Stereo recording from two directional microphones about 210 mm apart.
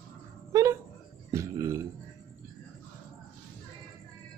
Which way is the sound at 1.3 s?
15° right (ahead or behind).